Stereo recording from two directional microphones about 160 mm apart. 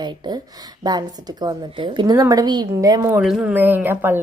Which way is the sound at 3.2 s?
5° right (ahead or behind).